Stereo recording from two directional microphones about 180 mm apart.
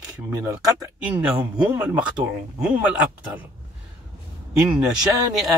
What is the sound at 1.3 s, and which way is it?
Speech, 20° right (ahead or behind).